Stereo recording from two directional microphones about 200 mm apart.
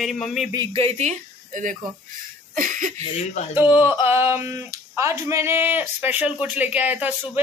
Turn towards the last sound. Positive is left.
turn(degrees=-10)  # may be behind; listen again after turning